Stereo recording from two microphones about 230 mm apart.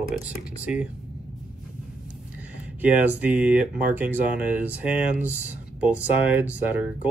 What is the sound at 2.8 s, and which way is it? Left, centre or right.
Speech, centre.